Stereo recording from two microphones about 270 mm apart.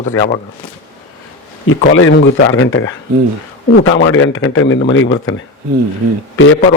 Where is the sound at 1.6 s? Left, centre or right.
Left.